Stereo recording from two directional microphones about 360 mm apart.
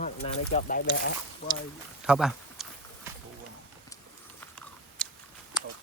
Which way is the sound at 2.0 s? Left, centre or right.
Centre.